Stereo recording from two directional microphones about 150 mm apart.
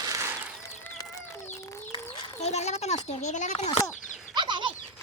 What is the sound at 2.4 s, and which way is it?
Speech, 45° left (ahead or behind).